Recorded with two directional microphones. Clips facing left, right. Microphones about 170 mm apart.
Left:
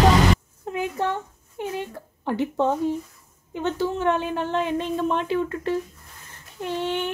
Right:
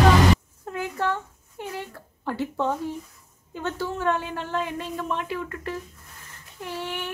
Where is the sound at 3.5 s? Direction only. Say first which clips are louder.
Left 5 dB; 20° left (ahead or behind).